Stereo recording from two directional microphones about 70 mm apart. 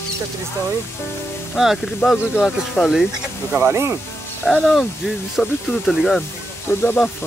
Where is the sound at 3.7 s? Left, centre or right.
Right.